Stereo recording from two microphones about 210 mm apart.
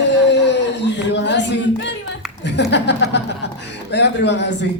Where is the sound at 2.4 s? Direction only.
55° left (ahead or behind).